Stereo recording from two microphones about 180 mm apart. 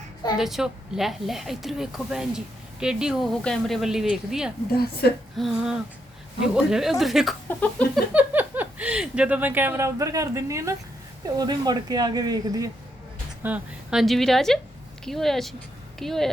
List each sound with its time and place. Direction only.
0.3 s a woman's voice: centre (ahead or behind)
4.7 s a woman's voice: 60° left (ahead or behind)
5.4 s a woman's voice: centre (ahead or behind)
7.6 s a sound: 5° left (ahead or behind)
8.1 s speech: 10° right (ahead or behind)
13.4 s a woman's voice: 5° right (ahead or behind)